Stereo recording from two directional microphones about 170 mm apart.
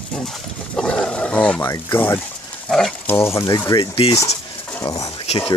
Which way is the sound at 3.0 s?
15° left (ahead or behind).